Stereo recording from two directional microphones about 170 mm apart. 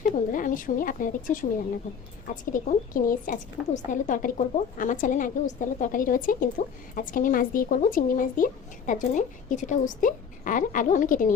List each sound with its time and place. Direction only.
0.0 s a woman's voice: 50° left (ahead or behind)